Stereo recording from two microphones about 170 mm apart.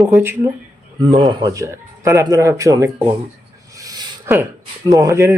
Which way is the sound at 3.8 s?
20° right (ahead or behind).